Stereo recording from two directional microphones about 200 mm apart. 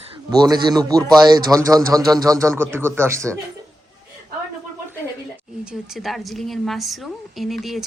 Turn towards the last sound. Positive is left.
turn(degrees=0)  # may be behind; listen again after turning